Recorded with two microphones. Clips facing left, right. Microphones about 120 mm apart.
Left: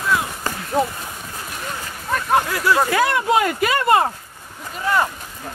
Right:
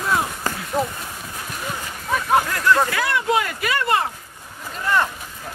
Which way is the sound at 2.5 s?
10° left (ahead or behind).